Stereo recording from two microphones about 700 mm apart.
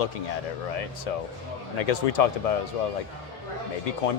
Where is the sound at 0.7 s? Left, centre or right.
Left.